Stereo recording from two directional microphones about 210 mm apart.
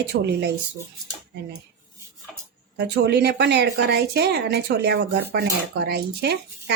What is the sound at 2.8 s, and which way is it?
Speech, 50° right (ahead or behind).